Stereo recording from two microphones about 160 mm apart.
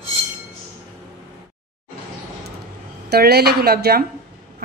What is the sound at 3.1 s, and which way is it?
Speech, 85° right.